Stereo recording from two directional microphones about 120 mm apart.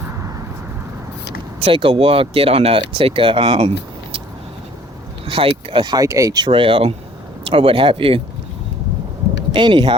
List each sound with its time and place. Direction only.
1.6 s speech: 50° right (ahead or behind)
5.3 s speech: 50° right (ahead or behind)
5.8 s speech: 35° right (ahead or behind)
9.5 s speech: 40° right (ahead or behind)